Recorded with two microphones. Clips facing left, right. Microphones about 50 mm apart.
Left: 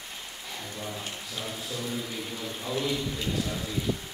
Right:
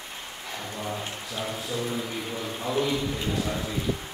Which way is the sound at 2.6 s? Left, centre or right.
Right.